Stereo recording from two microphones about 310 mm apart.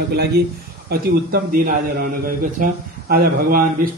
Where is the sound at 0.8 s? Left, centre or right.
Right.